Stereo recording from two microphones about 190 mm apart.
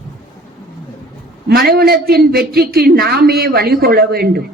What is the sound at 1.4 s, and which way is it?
A man's voice, 55° right (ahead or behind).